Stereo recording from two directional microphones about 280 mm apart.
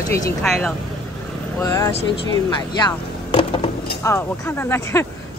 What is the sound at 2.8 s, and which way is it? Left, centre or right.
Music, centre.